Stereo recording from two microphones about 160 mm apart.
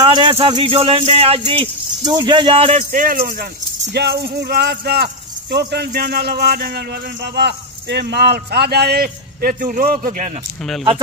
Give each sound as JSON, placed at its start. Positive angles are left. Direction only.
{"t": 0.0, "sound": "speech", "side_deg": -30}
{"t": 2.9, "sound": "speech", "side_deg": -60}
{"t": 3.9, "sound": "speech", "side_deg": -90}